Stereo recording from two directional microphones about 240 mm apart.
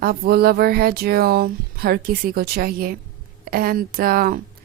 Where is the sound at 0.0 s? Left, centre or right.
Right.